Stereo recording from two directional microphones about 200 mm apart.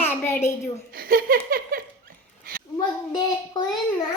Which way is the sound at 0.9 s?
45° right (ahead or behind).